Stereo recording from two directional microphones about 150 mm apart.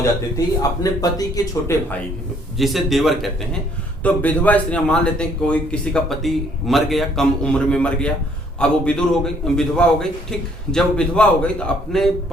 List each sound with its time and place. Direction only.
0.3 s a man's voice: 25° left (ahead or behind)
2.6 s a man's voice: centre (ahead or behind)
4.0 s a man's voice: 10° left (ahead or behind)